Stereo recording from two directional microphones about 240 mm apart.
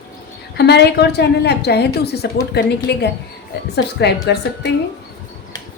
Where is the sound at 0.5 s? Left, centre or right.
Left.